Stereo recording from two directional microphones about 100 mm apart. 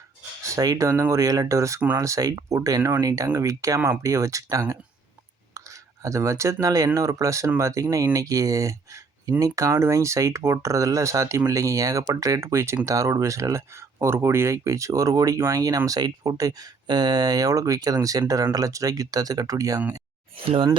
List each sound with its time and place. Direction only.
0.4 s speech: 35° right (ahead or behind)
20.4 s speech: 70° right (ahead or behind)